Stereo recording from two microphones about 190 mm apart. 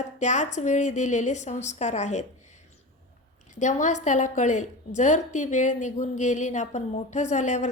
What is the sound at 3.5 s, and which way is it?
A woman's voice, 40° left (ahead or behind).